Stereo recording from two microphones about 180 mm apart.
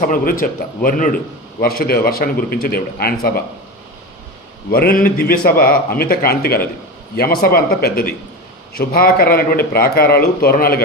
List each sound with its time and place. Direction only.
0.1 s a man's voice: 50° left (ahead or behind)
4.7 s a man's voice: 55° left (ahead or behind)